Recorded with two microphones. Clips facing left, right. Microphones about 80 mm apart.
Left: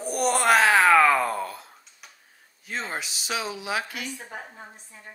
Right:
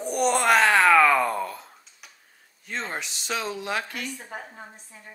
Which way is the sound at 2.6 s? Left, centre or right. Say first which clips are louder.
Even; centre.